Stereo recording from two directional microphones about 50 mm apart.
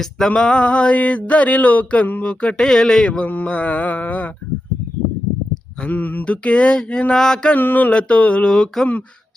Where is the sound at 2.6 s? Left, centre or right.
Centre.